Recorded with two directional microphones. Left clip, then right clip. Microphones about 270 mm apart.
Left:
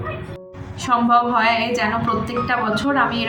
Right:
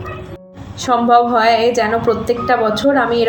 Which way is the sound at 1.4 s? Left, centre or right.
Centre.